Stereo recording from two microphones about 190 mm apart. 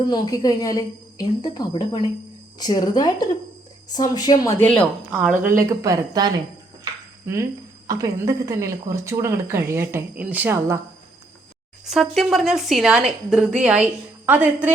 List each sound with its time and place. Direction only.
0.0 s a woman's voice: 20° left (ahead or behind)
5.1 s a woman's voice: 5° right (ahead or behind)
5.5 s speech: 15° right (ahead or behind)
11.9 s a woman's voice: centre (ahead or behind)